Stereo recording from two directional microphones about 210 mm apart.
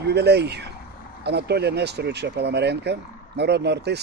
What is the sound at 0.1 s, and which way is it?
Speech, 50° right (ahead or behind).